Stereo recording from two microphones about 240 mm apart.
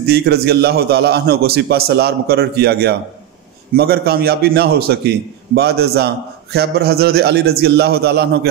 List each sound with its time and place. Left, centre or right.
0.0 s a man's voice: right